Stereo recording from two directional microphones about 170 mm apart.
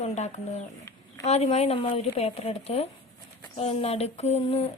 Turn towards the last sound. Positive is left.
turn(degrees=35)  # may be behind; listen again after turning